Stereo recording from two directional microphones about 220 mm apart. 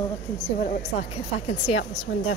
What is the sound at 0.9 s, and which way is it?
Speech, 25° left (ahead or behind).